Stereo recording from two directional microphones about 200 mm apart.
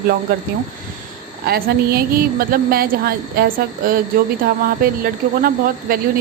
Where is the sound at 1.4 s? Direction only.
50° right (ahead or behind).